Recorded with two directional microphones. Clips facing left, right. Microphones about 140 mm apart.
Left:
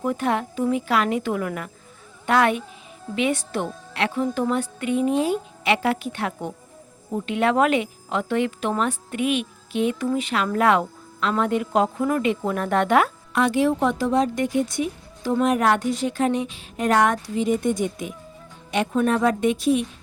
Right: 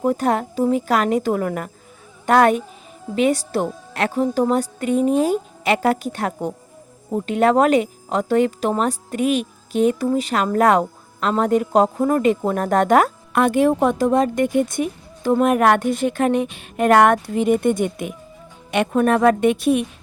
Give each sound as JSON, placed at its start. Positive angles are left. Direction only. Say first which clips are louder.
{"t": 0.0, "sound": "a woman's voice", "louder": "right 4 dB", "side_deg": -40}